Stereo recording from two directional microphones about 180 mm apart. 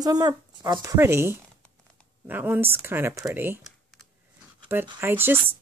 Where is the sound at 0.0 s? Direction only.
20° right (ahead or behind).